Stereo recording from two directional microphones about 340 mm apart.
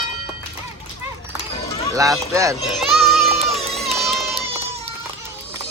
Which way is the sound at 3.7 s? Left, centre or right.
Centre.